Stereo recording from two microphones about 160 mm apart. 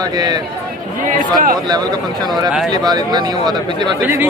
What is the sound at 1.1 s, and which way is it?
Speech, 55° right (ahead or behind).